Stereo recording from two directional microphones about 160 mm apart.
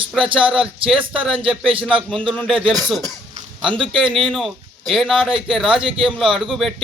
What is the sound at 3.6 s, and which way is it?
Speech, 30° right (ahead or behind).